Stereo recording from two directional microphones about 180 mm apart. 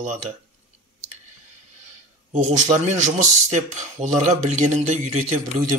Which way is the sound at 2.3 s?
40° right (ahead or behind).